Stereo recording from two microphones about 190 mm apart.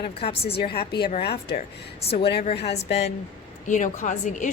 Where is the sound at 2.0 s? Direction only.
30° left (ahead or behind).